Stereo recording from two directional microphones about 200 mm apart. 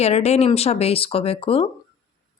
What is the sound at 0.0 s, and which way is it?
Speech, 30° left (ahead or behind).